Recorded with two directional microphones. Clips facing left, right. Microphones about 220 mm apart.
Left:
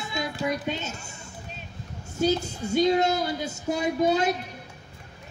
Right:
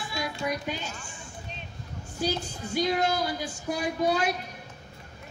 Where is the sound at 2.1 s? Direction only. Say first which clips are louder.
Left 6 dB; 25° left (ahead or behind).